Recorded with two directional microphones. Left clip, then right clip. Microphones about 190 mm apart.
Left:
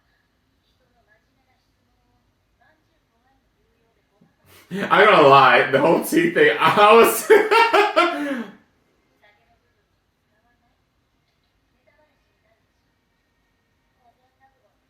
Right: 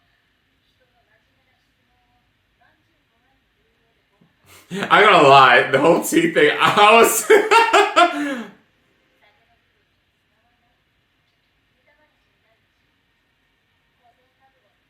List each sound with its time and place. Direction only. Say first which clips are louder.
4.4 s speech: right 2 dB; 20° right (ahead or behind)